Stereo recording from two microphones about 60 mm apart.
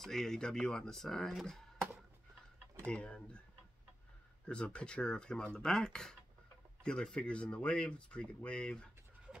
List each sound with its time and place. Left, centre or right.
0.0 s speech: centre
2.9 s speech: centre
4.5 s speech: centre